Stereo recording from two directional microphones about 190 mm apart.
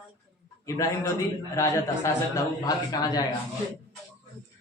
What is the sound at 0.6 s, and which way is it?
A man's voice, 15° left (ahead or behind).